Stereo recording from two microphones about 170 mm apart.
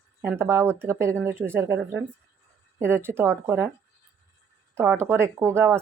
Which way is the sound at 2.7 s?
15° right (ahead or behind).